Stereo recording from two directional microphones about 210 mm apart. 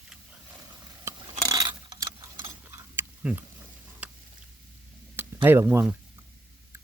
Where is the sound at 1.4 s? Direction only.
20° right (ahead or behind).